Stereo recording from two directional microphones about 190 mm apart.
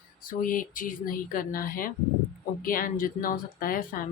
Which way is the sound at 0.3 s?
45° left (ahead or behind).